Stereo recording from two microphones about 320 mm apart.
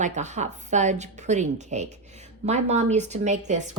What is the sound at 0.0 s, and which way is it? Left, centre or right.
A woman's voice, right.